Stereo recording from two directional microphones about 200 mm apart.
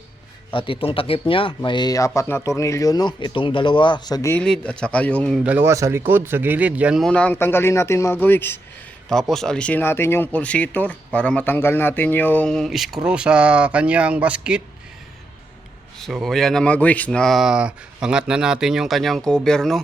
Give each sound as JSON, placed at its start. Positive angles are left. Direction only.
{"t": 0.5, "sound": "speech", "side_deg": 25}
{"t": 5.4, "sound": "speech", "side_deg": -10}
{"t": 16.0, "sound": "speech", "side_deg": 0}